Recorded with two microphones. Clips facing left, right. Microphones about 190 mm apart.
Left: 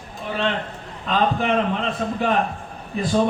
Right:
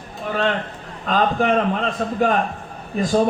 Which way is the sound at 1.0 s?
45° right (ahead or behind).